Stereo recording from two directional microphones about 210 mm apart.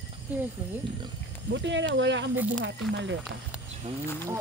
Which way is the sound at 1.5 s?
60° right (ahead or behind).